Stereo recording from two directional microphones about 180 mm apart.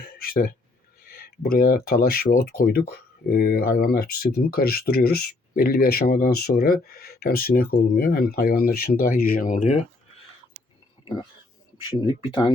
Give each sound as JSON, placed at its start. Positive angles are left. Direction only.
{"t": 0.2, "sound": "a sound", "side_deg": 55}
{"t": 1.5, "sound": "speech", "side_deg": 55}
{"t": 11.9, "sound": "speech", "side_deg": 25}